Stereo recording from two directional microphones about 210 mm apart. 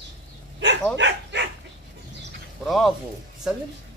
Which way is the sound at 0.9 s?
55° right (ahead or behind).